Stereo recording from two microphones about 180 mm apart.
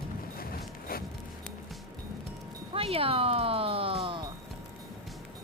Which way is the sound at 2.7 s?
30° right (ahead or behind).